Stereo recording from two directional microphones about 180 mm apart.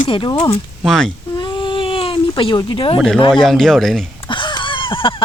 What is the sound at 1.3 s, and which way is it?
Baby cry, 25° left (ahead or behind).